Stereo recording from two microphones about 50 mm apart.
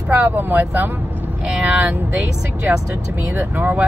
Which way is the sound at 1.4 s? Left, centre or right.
Centre.